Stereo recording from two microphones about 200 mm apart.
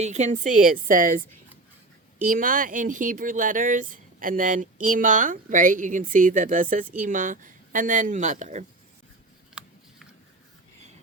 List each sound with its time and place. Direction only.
0.0 s speech: 35° right (ahead or behind)
2.2 s speech: 45° right (ahead or behind)